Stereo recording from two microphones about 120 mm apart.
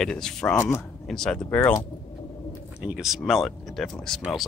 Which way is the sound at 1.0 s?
5° left (ahead or behind).